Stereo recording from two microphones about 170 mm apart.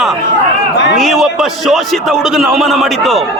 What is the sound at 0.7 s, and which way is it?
Speech, 90° left.